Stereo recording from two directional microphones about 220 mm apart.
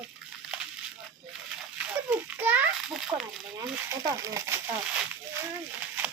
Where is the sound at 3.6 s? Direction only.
15° right (ahead or behind).